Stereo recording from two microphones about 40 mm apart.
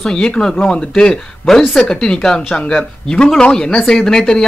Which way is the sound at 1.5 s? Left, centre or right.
Centre.